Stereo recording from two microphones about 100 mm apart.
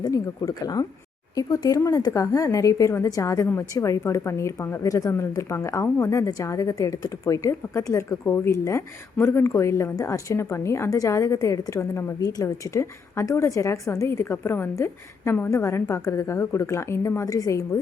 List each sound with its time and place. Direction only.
0.0 s a woman's voice: 40° left (ahead or behind)